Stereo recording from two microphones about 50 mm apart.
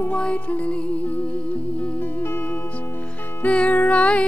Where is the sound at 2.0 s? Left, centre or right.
Left.